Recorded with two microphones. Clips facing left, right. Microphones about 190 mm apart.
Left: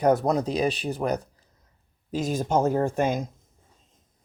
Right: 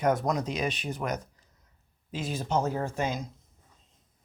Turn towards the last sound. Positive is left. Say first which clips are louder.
# left 7 dB
turn(degrees=50)  # may be behind; listen again after turning